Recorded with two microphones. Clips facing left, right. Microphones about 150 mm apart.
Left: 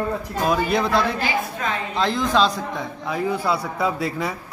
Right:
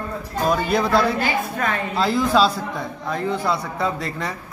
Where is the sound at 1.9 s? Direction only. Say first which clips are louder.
Right 2 dB; 5° right (ahead or behind).